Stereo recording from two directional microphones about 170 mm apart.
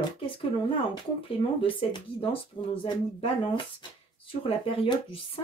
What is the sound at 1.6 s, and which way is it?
Speech, 30° left (ahead or behind).